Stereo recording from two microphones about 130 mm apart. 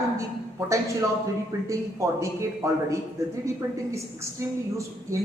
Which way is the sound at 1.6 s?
25° right (ahead or behind).